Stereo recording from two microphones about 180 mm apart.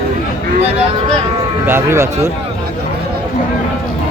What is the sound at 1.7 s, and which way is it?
Speech, 15° right (ahead or behind).